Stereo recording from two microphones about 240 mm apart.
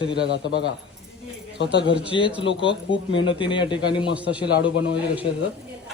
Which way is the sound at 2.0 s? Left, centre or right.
Left.